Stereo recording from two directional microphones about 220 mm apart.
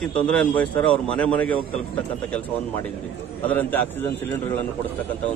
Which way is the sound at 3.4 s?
10° left (ahead or behind).